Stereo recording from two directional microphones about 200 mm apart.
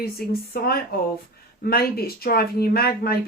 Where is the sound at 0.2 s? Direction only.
50° left (ahead or behind).